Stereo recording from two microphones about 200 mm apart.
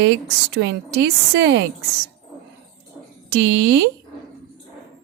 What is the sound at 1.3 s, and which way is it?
Speech, 60° right (ahead or behind).